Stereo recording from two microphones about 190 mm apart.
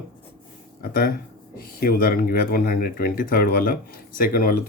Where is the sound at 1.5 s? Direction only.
50° left (ahead or behind).